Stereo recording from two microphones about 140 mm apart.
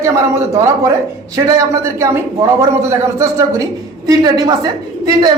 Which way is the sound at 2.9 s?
20° right (ahead or behind).